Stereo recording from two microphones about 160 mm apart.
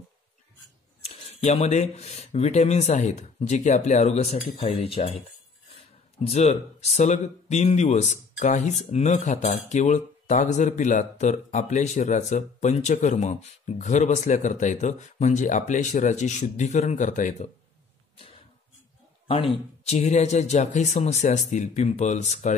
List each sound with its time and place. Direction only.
1.0 s speech: 40° left (ahead or behind)
6.2 s speech: 40° left (ahead or behind)
19.2 s speech: 35° left (ahead or behind)